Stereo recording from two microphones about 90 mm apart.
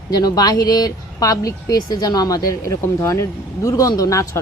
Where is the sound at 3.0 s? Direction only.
35° left (ahead or behind).